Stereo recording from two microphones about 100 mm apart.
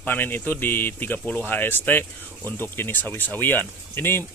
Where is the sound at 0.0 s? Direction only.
20° left (ahead or behind).